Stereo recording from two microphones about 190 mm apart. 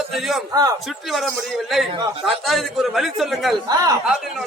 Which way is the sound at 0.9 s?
Centre (ahead or behind).